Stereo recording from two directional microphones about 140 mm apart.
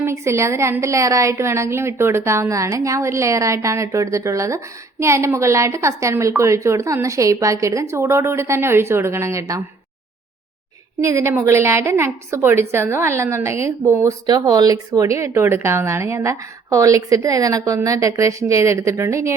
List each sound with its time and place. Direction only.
0.0 s a woman's voice: 20° right (ahead or behind)
11.0 s a woman's voice: 20° right (ahead or behind)